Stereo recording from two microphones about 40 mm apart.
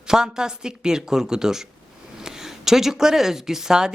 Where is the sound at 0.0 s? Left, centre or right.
Centre.